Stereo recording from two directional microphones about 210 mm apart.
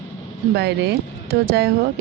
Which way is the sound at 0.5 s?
50° right (ahead or behind).